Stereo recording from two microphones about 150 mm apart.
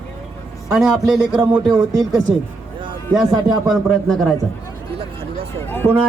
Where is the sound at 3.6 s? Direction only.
Centre (ahead or behind).